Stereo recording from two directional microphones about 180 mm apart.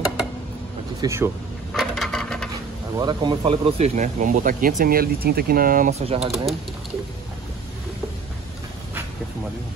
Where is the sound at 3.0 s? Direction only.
25° right (ahead or behind); by 5.9 s 50° right (ahead or behind).